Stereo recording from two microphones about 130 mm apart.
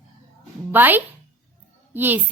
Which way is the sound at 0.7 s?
15° right (ahead or behind).